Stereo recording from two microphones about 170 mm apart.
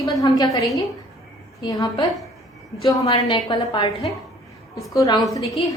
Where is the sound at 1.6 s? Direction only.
25° left (ahead or behind).